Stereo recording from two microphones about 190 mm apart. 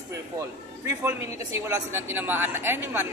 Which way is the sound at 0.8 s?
15° right (ahead or behind).